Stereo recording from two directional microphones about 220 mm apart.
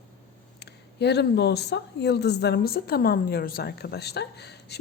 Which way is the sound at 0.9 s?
50° left (ahead or behind).